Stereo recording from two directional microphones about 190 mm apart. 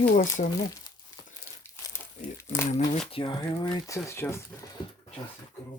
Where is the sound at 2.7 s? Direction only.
30° left (ahead or behind); by 4.4 s 15° left (ahead or behind).